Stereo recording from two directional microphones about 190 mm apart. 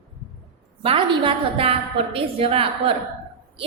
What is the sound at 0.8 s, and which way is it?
A woman's voice, 25° right (ahead or behind).